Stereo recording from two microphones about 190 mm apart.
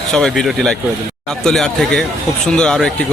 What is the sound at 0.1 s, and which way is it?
A man's voice, 5° left (ahead or behind).